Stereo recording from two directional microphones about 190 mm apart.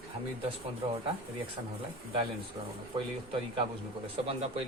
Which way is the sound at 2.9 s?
30° right (ahead or behind).